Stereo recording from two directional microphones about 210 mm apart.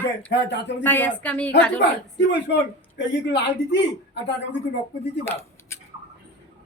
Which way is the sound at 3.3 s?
55° left (ahead or behind).